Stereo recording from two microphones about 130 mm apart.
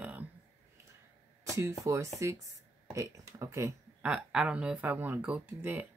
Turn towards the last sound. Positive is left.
turn(degrees=-15)  # may be behind; listen again after turning